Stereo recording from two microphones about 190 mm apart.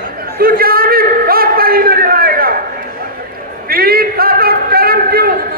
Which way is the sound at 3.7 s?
50° right (ahead or behind).